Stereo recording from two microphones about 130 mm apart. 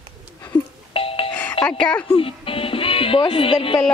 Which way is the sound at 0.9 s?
45° left (ahead or behind).